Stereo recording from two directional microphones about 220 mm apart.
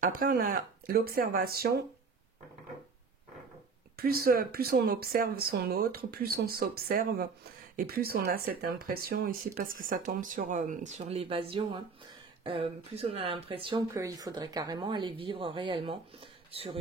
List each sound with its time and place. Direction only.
0.2 s speech: 40° right (ahead or behind)
3.9 s speech: 45° right (ahead or behind); by 16.0 s 25° right (ahead or behind)